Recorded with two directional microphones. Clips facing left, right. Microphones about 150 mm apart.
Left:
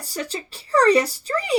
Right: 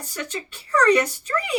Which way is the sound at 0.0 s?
35° left (ahead or behind).